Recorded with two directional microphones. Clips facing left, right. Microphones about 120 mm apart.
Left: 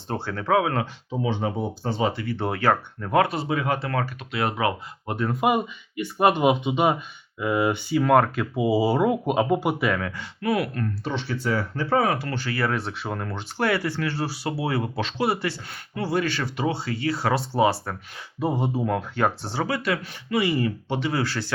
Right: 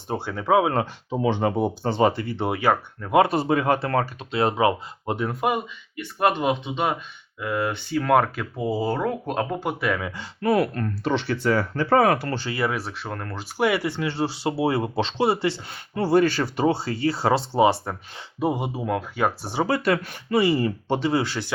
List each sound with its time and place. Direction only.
0.1 s speech: 15° right (ahead or behind)
1.1 s speech: 65° right (ahead or behind)
2.2 s speech: 20° right (ahead or behind); by 3.1 s 5° right (ahead or behind)
3.3 s speech: 45° right (ahead or behind); by 5.2 s 25° right (ahead or behind)
5.3 s speech: 5° left (ahead or behind)
10.2 s speech: 40° right (ahead or behind)
11.0 s speech: 80° right; by 12.3 s 60° right (ahead or behind)
12.3 s speech: 25° right (ahead or behind)
12.7 s speech: centre (ahead or behind)
13.6 s speech: 15° right (ahead or behind)
16.0 s speech: 40° right (ahead or behind); by 19.6 s 10° right (ahead or behind)
19.6 s speech: 40° right (ahead or behind)
21.1 s speech: 20° right (ahead or behind)